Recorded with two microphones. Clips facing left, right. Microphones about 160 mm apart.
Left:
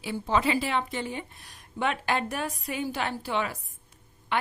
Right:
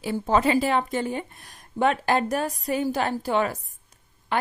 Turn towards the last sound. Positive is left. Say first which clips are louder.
# right 3 dB
turn(degrees=-40)  # may be behind; listen again after turning